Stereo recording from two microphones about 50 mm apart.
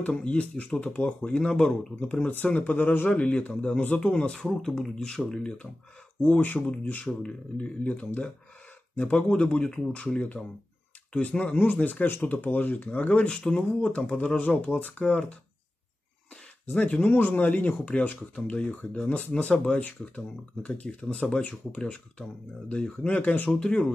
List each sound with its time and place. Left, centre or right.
0.0 s speech: left
4.3 s speech: centre
6.4 s speech: left
16.8 s speech: left
23.0 s speech: left
23.5 s speech: centre